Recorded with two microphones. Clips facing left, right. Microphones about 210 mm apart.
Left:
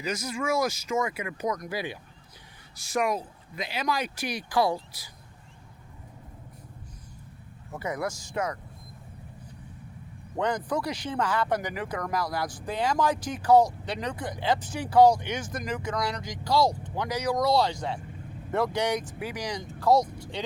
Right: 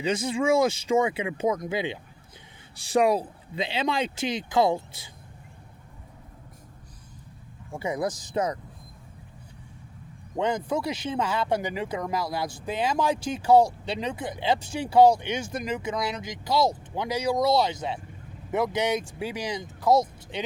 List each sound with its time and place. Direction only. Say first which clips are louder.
0.0 s speech: right 6 dB; 30° right (ahead or behind)
7.7 s speech: right 3 dB; 25° right (ahead or behind)
10.3 s speech: right 2 dB; 25° right (ahead or behind)